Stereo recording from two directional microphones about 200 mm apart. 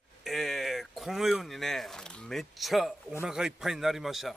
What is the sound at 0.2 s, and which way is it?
Speech, centre (ahead or behind).